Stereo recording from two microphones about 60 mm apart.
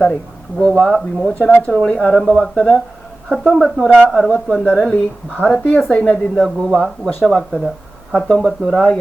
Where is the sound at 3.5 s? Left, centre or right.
Centre.